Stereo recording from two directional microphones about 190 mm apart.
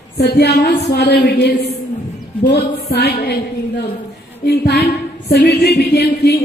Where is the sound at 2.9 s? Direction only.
55° left (ahead or behind).